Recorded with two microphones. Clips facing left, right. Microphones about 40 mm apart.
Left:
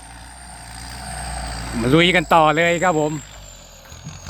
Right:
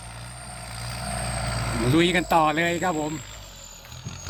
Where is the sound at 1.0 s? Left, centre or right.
Centre.